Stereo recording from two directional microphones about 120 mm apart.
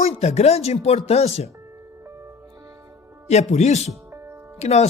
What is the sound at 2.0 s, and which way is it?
Music, 20° right (ahead or behind).